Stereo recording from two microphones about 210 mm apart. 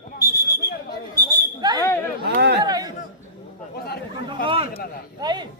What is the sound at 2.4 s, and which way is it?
Speech, 50° right (ahead or behind).